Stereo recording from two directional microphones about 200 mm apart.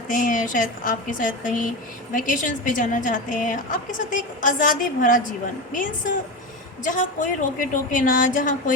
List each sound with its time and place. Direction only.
0.1 s a woman's voice: 40° left (ahead or behind)
6.8 s a woman's voice: 40° left (ahead or behind)